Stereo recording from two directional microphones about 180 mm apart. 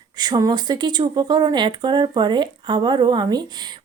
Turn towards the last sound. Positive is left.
turn(degrees=-25)  # may be behind; listen again after turning